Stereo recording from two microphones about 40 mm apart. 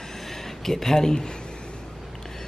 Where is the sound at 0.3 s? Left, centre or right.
Centre.